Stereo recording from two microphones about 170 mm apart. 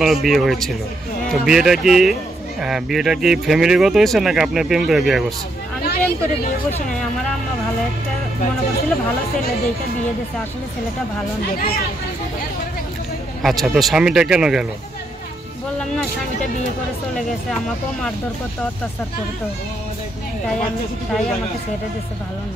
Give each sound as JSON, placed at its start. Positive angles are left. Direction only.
{"t": 0.0, "sound": "speech", "side_deg": 0}
{"t": 5.9, "sound": "speech", "side_deg": 60}
{"t": 13.4, "sound": "speech", "side_deg": 0}